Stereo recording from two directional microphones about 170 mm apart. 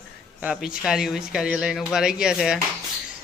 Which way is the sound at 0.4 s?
5° right (ahead or behind).